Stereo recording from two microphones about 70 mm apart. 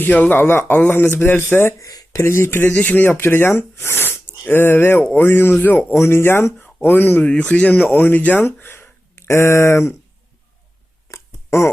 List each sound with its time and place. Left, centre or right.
0.0 s a man's voice: left
1.8 s speech: left
2.1 s a man's voice: left
5.9 s a man's voice: left
7.3 s speech: centre; by 10.0 s left
11.1 s a sound: left